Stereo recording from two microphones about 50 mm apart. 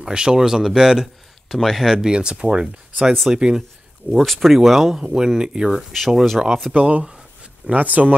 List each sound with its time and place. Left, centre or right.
0.0 s speech: centre
1.5 s speech: centre
2.0 s speech: centre
4.1 s speech: centre
6.7 s speech: right